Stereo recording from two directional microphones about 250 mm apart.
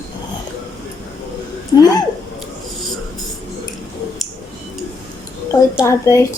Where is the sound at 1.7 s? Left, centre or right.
Centre.